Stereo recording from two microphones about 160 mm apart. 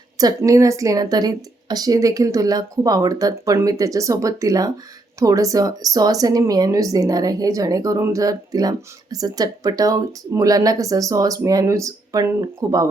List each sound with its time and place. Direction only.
0.2 s speech: 20° right (ahead or behind)